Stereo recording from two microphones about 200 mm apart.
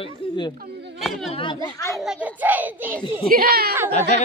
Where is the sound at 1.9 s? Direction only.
5° right (ahead or behind).